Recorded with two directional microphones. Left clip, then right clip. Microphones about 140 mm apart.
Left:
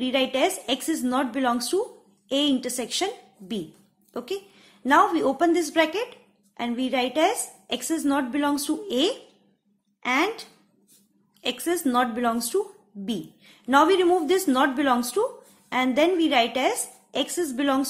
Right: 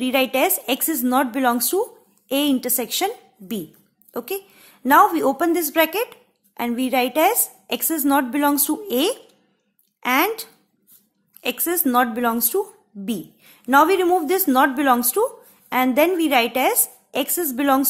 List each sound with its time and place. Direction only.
0.0 s a woman's voice: 40° right (ahead or behind)